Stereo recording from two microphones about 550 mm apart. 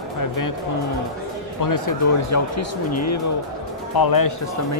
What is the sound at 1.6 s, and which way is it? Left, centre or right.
Speech, left.